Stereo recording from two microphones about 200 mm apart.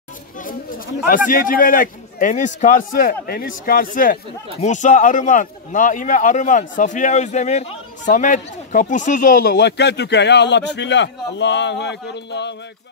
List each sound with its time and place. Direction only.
0.4 s speech: 45° left (ahead or behind)